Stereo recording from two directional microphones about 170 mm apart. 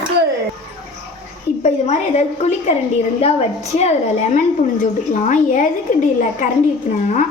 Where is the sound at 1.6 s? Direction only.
40° left (ahead or behind).